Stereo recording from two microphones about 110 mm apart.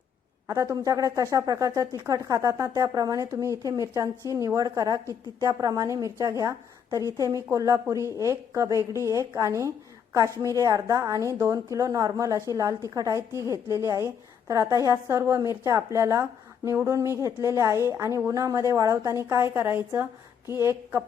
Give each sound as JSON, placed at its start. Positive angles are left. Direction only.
{"t": 0.4, "sound": "a woman's voice", "side_deg": -30}